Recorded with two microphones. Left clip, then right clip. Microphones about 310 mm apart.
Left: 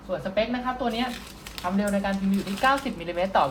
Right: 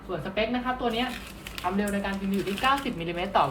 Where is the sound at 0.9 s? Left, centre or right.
Left.